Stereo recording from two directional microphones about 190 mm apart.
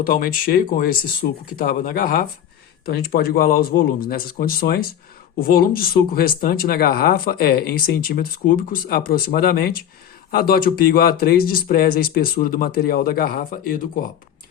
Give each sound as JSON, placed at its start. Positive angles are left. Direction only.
{"t": 0.0, "sound": "speech", "side_deg": 50}